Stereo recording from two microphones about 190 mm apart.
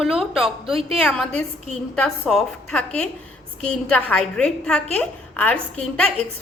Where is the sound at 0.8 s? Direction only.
30° right (ahead or behind).